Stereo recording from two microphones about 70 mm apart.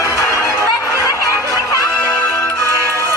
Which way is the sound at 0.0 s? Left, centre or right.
Left.